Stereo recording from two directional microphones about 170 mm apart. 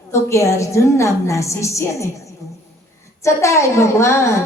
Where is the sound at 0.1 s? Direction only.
15° left (ahead or behind).